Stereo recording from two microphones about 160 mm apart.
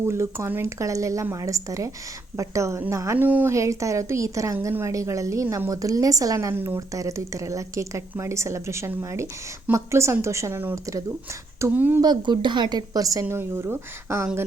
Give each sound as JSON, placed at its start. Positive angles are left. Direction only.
{"t": 0.0, "sound": "a woman's voice", "side_deg": -15}
{"t": 12.0, "sound": "a woman's voice", "side_deg": -30}